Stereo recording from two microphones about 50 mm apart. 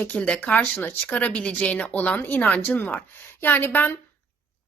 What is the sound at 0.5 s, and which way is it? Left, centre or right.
Speech, left.